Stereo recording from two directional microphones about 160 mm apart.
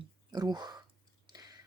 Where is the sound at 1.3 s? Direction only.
25° right (ahead or behind).